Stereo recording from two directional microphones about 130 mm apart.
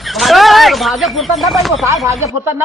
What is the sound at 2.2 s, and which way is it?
Speech, 20° right (ahead or behind).